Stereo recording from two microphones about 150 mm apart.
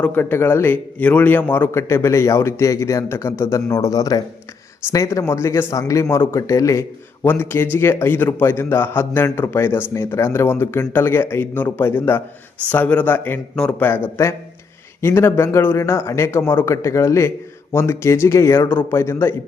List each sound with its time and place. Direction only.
0.0 s speech: 15° left (ahead or behind)